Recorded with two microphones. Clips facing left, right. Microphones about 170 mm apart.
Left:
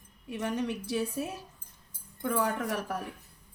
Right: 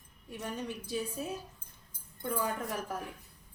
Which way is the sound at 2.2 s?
75° left (ahead or behind).